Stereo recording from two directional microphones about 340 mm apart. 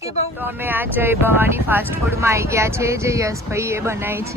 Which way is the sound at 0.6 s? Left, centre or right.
Centre.